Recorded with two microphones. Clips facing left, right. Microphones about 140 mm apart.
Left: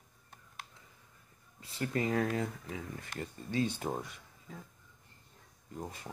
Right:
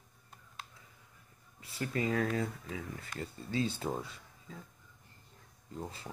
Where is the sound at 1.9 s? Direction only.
25° left (ahead or behind).